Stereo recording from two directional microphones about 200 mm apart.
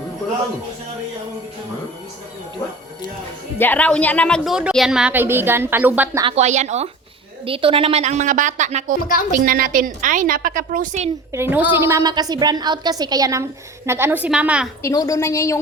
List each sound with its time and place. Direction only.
3.6 s a woman's voice: 10° left (ahead or behind); by 6.2 s 10° right (ahead or behind)
6.2 s a woman's voice: 35° right (ahead or behind)
11.3 s a woman's voice: 10° right (ahead or behind)
14.8 s a woman's voice: 15° left (ahead or behind)